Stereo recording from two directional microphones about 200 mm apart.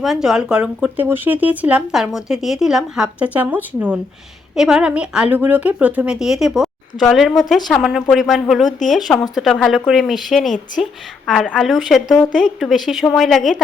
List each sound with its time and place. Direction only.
0.0 s speech: centre (ahead or behind)